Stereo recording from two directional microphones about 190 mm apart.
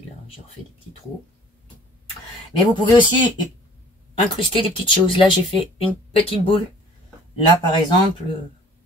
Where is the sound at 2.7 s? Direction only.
25° left (ahead or behind).